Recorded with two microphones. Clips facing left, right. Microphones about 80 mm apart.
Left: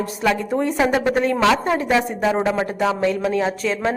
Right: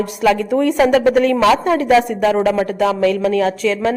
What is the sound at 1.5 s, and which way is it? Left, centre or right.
Speech, centre.